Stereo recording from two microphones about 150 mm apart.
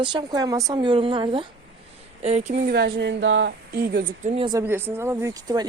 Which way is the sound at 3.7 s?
80° right.